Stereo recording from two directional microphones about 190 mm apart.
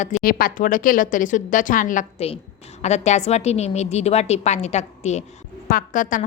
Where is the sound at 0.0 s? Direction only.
45° left (ahead or behind).